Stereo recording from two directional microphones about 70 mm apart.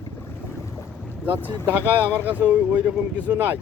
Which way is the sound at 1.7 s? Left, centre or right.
Right.